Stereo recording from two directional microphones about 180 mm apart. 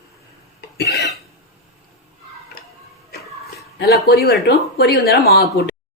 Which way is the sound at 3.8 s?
60° left (ahead or behind).